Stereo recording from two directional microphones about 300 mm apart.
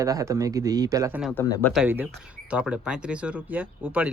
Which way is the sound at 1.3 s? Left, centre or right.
Centre.